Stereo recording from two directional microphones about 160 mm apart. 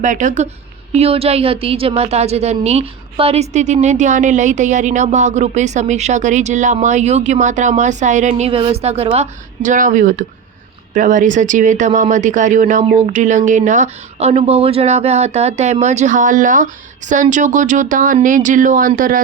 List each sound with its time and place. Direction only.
0.0 s a woman's voice: 50° right (ahead or behind)
0.9 s a woman's voice: 40° right (ahead or behind); by 19.2 s 60° right (ahead or behind)